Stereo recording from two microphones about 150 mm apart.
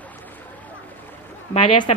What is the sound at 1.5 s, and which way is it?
Speech, 30° left (ahead or behind).